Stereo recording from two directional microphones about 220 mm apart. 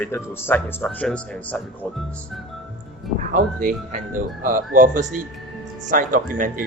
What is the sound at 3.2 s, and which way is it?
Speech, 35° right (ahead or behind).